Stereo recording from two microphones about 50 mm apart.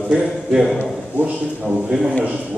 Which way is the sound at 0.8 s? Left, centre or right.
Right.